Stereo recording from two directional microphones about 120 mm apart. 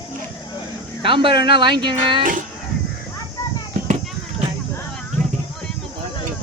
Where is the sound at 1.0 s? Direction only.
45° right (ahead or behind).